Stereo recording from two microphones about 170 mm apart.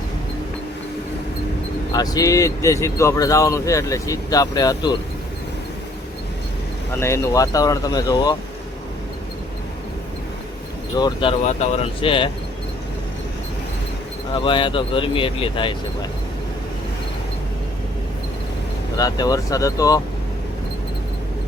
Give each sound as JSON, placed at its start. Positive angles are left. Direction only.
{"t": 1.9, "sound": "speech", "side_deg": 20}
{"t": 6.9, "sound": "speech", "side_deg": 15}
{"t": 10.9, "sound": "speech", "side_deg": 25}
{"t": 11.4, "sound": "speech", "side_deg": 40}
{"t": 14.3, "sound": "speech", "side_deg": 30}
{"t": 18.9, "sound": "speech", "side_deg": 20}